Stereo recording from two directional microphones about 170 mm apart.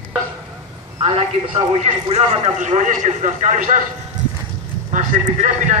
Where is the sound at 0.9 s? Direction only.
30° right (ahead or behind); by 3.8 s 45° right (ahead or behind).